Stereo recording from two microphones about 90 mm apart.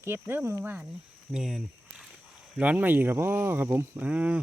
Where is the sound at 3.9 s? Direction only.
15° right (ahead or behind).